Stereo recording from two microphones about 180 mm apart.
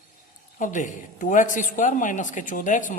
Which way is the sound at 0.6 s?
45° left (ahead or behind).